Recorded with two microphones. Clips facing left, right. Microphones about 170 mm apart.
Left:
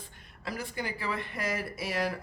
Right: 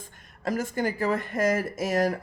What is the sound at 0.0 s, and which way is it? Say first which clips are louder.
Speech: right 9 dB; 45° right (ahead or behind).